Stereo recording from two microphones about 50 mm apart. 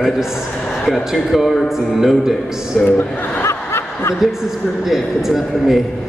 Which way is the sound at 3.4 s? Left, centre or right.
Left.